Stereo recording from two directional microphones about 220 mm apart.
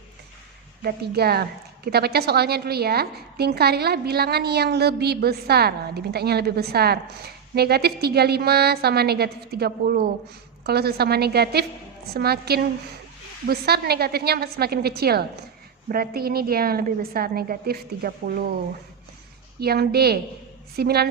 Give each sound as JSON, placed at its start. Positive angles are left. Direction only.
{"t": 0.8, "sound": "a woman's voice", "side_deg": -45}
{"t": 19.5, "sound": "a woman's voice", "side_deg": -45}